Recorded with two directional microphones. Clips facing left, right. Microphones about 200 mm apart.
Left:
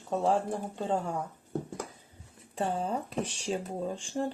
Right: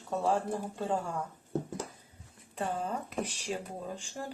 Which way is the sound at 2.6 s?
30° left (ahead or behind).